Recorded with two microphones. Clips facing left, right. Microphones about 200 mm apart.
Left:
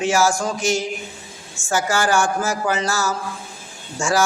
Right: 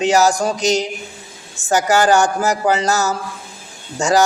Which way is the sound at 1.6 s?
35° right (ahead or behind).